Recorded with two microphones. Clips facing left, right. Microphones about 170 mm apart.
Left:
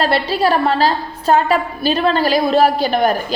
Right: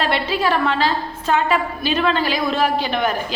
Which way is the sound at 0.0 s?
35° left (ahead or behind).